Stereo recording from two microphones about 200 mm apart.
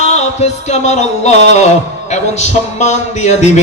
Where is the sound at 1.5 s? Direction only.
35° left (ahead or behind).